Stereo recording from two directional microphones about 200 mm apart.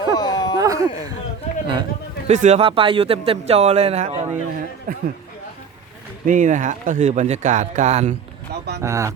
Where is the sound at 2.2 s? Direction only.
35° right (ahead or behind).